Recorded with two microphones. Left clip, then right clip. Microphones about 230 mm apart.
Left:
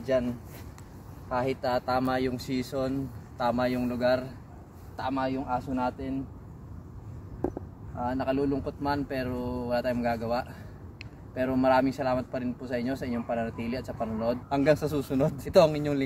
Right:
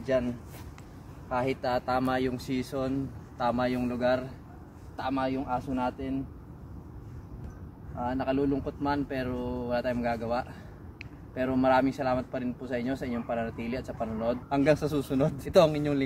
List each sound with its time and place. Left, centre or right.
0.0 s speech: centre
1.3 s a man's voice: centre
8.0 s a man's voice: centre